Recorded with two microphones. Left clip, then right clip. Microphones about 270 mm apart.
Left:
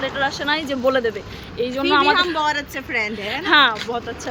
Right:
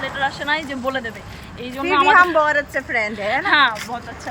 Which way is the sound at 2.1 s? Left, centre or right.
Centre.